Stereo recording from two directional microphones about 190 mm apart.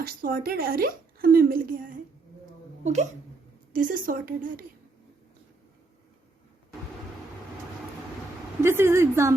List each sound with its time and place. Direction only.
0.2 s a woman's voice: 50° right (ahead or behind)
8.6 s a woman's voice: 15° right (ahead or behind)